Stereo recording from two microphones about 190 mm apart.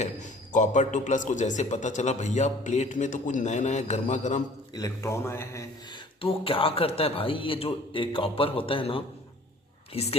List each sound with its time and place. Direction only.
0.0 s speech: 40° left (ahead or behind)
4.7 s a man's voice: 15° left (ahead or behind)
6.2 s a man's voice: 30° left (ahead or behind)